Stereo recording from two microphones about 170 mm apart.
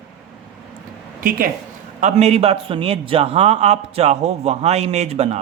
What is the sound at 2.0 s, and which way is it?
A man's voice, 40° right (ahead or behind).